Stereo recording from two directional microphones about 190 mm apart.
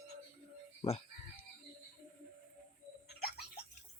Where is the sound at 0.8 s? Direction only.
30° left (ahead or behind).